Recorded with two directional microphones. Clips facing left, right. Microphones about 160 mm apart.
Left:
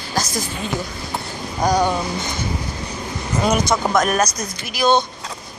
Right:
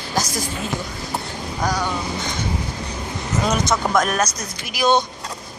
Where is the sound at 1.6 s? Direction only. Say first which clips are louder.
Left 6 dB; 20° left (ahead or behind).